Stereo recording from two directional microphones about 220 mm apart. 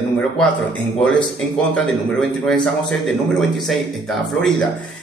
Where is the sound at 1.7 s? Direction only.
Centre (ahead or behind).